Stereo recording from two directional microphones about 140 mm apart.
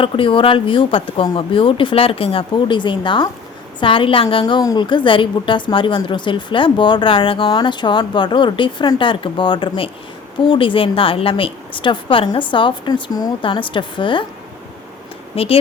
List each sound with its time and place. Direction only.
0.0 s a woman's voice: 40° left (ahead or behind)
15.3 s speech: 45° left (ahead or behind)